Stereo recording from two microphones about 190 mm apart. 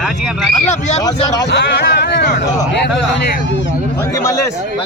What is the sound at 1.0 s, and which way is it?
Speech, 20° left (ahead or behind).